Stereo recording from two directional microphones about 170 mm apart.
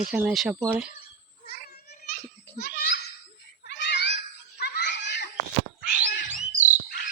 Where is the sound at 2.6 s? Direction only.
70° left (ahead or behind).